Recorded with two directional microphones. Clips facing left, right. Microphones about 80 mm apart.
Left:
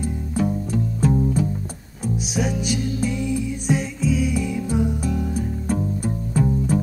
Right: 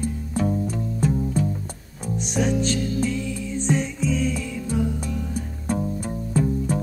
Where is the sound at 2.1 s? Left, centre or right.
Centre.